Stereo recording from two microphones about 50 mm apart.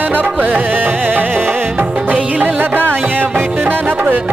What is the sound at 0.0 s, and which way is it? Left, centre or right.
Music, right.